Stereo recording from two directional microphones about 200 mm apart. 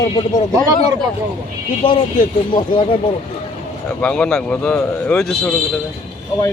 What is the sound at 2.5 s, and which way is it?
Speech, 25° left (ahead or behind).